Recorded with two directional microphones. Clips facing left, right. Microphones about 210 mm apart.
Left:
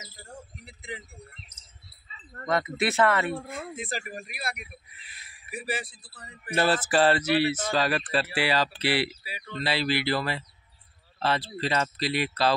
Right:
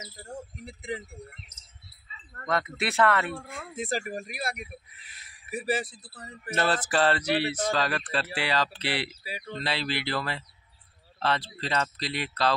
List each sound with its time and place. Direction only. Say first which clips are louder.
0.7 s speech: right 5 dB; 45° right (ahead or behind)
2.4 s speech: left 3 dB; centre (ahead or behind)
3.7 s speech: right 4 dB; 45° right (ahead or behind)
6.5 s speech: left 3 dB; 5° left (ahead or behind)
9.2 s speech: right 3 dB; 40° right (ahead or behind)
9.6 s speech: left 5 dB; 5° left (ahead or behind)